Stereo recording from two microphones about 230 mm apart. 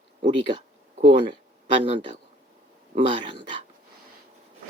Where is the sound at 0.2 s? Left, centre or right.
Right.